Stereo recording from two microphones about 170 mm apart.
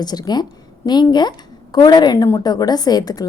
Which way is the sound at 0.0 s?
25° left (ahead or behind).